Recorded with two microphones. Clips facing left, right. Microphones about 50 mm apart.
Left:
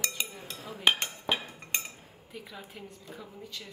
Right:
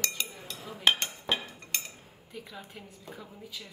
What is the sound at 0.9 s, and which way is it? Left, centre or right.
Cutlery, centre.